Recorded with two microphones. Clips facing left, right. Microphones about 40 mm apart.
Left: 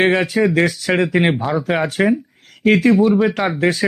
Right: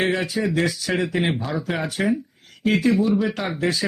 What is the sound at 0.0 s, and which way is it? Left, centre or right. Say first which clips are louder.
Speech: left 7 dB; left.